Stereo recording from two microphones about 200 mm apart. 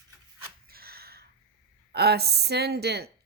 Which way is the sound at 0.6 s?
50° right (ahead or behind).